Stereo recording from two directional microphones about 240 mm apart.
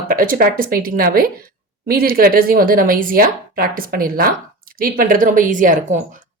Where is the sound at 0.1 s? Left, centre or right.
Right.